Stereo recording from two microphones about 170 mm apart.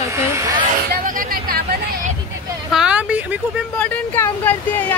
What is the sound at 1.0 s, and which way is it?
Speech, 55° right (ahead or behind).